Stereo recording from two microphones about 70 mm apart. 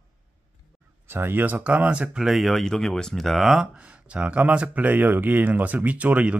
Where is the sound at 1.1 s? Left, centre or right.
Right; by 2.3 s centre.